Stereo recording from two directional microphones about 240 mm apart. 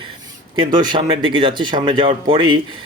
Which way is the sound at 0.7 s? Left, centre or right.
Centre.